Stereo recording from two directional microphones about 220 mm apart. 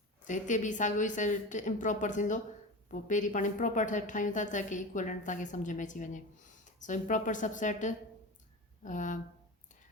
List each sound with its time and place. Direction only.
0.3 s a woman's voice: 35° left (ahead or behind)